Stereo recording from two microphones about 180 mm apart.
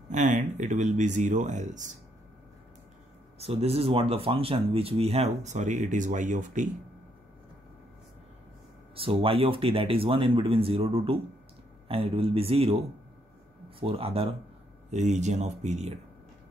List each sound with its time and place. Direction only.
0.1 s speech: 45° right (ahead or behind)
3.3 s speech: 35° right (ahead or behind)
8.9 s speech: 30° right (ahead or behind)
13.7 s speech: 30° right (ahead or behind)